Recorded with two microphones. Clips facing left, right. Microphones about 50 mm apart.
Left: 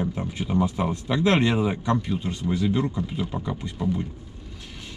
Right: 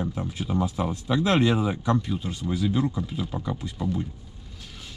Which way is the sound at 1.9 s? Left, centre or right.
Centre.